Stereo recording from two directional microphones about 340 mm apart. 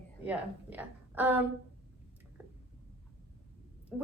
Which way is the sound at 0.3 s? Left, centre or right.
Centre.